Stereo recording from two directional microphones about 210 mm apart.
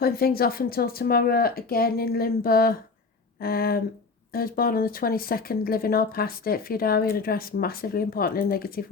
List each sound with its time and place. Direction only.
0.0 s speech: 45° left (ahead or behind)